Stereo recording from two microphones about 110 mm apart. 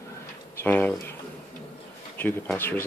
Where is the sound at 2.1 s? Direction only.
15° left (ahead or behind).